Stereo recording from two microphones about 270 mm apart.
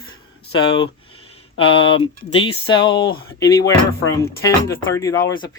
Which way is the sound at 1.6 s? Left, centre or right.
Centre.